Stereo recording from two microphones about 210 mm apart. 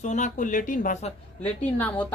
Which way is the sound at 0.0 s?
35° left (ahead or behind).